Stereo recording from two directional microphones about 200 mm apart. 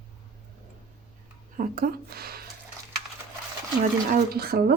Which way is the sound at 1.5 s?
45° right (ahead or behind).